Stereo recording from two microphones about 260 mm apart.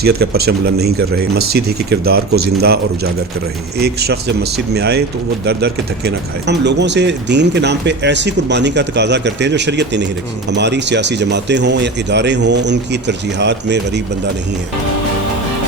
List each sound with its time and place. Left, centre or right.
0.0 s speech: right